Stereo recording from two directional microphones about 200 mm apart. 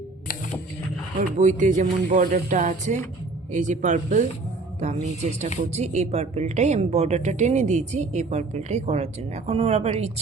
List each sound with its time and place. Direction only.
1.4 s a woman's voice: 35° right (ahead or behind)